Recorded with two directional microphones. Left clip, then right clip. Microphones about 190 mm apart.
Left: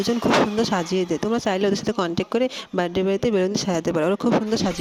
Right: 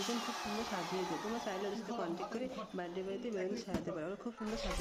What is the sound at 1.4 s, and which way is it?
Speech, 55° left (ahead or behind).